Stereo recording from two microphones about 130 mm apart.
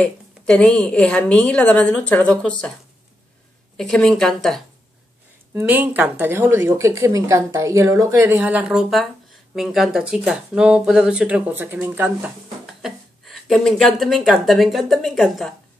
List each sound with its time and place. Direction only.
0.0 s a woman's voice: 5° left (ahead or behind)
3.7 s a woman's voice: 5° left (ahead or behind)
5.5 s speech: 15° right (ahead or behind)
12.6 s speech: centre (ahead or behind)